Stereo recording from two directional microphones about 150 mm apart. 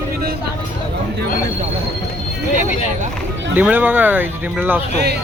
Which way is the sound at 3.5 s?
10° right (ahead or behind).